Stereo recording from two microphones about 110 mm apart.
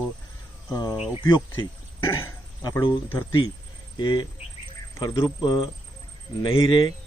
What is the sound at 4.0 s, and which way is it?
Speech, 40° left (ahead or behind).